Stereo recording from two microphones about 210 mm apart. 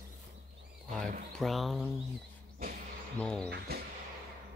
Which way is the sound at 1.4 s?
Centre (ahead or behind).